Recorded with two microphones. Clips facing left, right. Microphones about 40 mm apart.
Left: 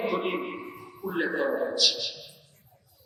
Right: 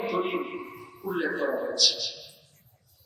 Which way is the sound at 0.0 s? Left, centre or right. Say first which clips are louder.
Even; centre.